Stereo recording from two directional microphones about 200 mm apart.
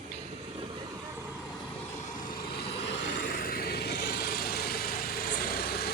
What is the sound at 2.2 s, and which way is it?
Vehicle, 50° left (ahead or behind).